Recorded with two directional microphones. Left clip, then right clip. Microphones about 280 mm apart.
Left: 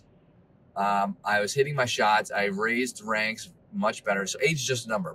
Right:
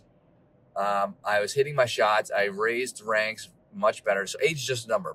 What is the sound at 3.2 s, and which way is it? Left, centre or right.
Speech, centre.